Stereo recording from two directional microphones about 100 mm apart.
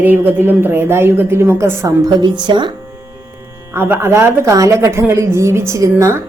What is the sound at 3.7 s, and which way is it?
A woman's voice, 20° right (ahead or behind).